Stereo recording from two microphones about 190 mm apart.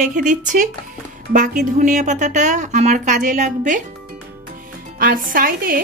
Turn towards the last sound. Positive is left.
turn(degrees=-50)  # may be behind; listen again after turning